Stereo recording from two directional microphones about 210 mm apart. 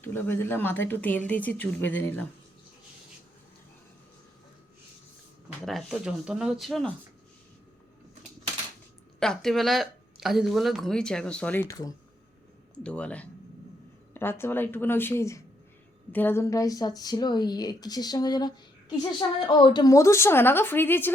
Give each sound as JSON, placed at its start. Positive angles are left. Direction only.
{"t": 0.0, "sound": "a woman's voice", "side_deg": 10}
{"t": 5.6, "sound": "speech", "side_deg": 0}
{"t": 9.2, "sound": "a woman's voice", "side_deg": 0}